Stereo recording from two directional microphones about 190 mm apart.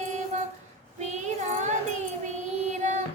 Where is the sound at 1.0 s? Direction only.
40° right (ahead or behind).